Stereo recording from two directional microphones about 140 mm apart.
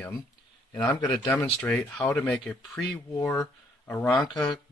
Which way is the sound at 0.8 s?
30° left (ahead or behind).